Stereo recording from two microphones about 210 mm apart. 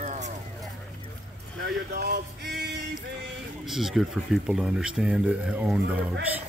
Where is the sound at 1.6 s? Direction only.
50° right (ahead or behind).